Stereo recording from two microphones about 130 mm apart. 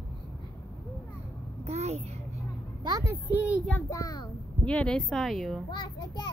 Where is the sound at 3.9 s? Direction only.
30° left (ahead or behind).